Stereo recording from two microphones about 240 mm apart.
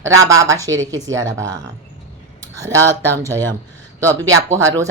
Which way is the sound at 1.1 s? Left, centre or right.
Right.